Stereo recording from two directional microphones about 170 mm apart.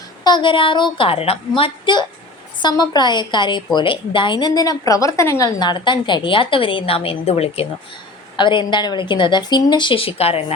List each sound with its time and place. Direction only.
0.3 s a woman's voice: 25° left (ahead or behind)